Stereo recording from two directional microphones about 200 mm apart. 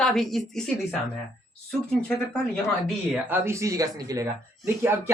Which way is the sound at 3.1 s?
10° right (ahead or behind).